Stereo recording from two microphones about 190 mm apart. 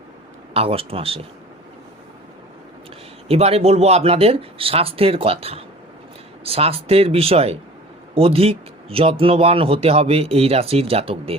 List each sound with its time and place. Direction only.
0.5 s speech: 30° right (ahead or behind)
3.2 s speech: 30° right (ahead or behind)